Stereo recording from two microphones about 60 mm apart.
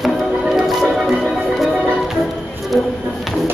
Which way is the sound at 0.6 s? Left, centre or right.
Centre.